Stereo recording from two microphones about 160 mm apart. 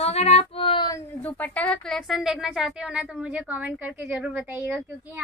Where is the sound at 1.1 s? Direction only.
10° left (ahead or behind); by 5.2 s 10° right (ahead or behind).